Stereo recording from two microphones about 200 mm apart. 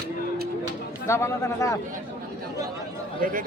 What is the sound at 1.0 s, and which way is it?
Speech, 15° left (ahead or behind).